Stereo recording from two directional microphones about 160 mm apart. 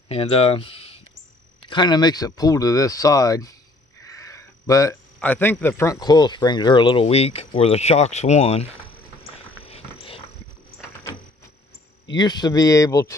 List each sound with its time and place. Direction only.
0.1 s speech: 35° left (ahead or behind)
4.0 s a sound: 20° left (ahead or behind)
5.2 s speech: 10° left (ahead or behind); by 8.6 s 40° left (ahead or behind)
12.1 s speech: 25° left (ahead or behind)